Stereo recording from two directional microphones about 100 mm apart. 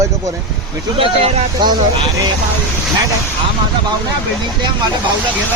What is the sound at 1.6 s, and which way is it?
Speech, 50° right (ahead or behind).